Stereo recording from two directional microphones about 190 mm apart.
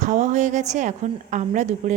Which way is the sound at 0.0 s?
40° right (ahead or behind).